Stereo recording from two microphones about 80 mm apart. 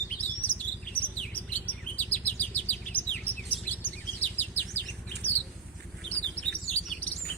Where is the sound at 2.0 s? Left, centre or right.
Centre.